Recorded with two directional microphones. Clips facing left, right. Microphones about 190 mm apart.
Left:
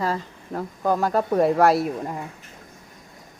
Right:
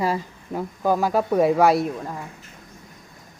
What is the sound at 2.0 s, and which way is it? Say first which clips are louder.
Speech: left 2 dB; 15° left (ahead or behind).